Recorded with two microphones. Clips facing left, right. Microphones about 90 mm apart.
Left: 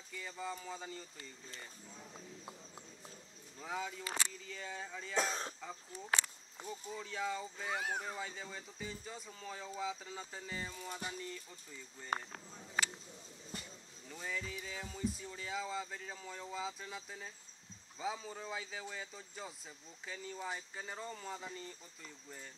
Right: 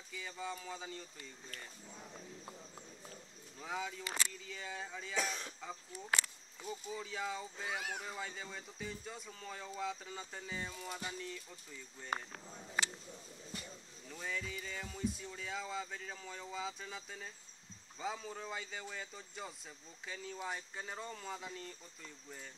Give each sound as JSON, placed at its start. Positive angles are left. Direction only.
{"t": 0.1, "sound": "speech", "side_deg": 0}
{"t": 3.5, "sound": "speech", "side_deg": 0}
{"t": 4.0, "sound": "speech", "side_deg": 35}
{"t": 4.3, "sound": "speech", "side_deg": 0}
{"t": 5.1, "sound": "speech", "side_deg": 35}
{"t": 5.6, "sound": "speech", "side_deg": -5}
{"t": 14.0, "sound": "speech", "side_deg": 0}